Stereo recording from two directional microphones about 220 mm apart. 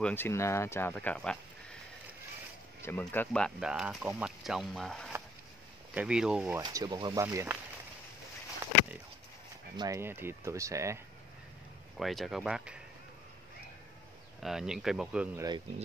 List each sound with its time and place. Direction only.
0.0 s speech: 10° left (ahead or behind)
2.8 s speech: 10° left (ahead or behind)
6.6 s speech: 15° right (ahead or behind)
9.8 s speech: 15° right (ahead or behind)
12.0 s speech: centre (ahead or behind)
14.4 s speech: centre (ahead or behind)